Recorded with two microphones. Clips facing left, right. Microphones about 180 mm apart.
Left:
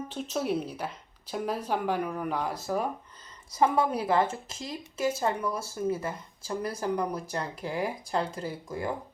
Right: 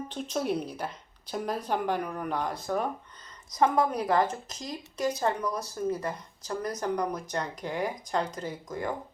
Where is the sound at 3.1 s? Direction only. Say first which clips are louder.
Even; 30° left (ahead or behind).